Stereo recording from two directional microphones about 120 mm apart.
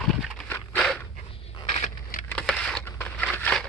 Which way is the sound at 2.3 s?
5° left (ahead or behind).